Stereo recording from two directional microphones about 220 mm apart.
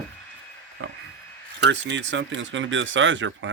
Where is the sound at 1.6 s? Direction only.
55° right (ahead or behind).